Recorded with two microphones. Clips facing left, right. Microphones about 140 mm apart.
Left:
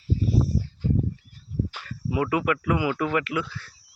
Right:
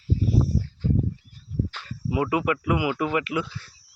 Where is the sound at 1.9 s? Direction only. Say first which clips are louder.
Even; 20° right (ahead or behind).